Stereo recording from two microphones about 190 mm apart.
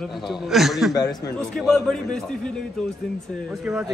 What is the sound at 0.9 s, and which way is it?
Speech, 20° left (ahead or behind).